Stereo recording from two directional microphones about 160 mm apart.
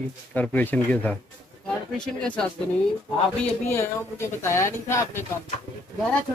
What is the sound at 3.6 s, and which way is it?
A man's voice, 15° left (ahead or behind).